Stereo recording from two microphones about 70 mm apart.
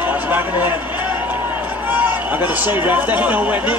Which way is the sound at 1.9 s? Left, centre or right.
Right.